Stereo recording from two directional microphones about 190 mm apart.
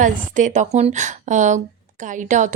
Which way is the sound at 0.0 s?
40° right (ahead or behind).